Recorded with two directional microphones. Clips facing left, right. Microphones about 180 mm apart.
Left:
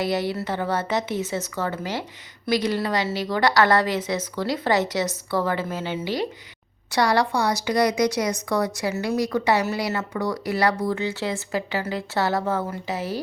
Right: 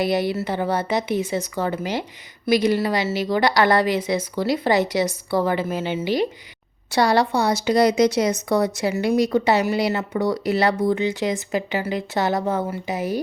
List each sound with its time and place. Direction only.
0.0 s a woman's voice: 15° right (ahead or behind)
6.9 s a woman's voice: 25° right (ahead or behind)